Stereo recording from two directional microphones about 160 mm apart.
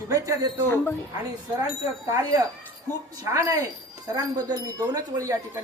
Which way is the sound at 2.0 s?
20° right (ahead or behind).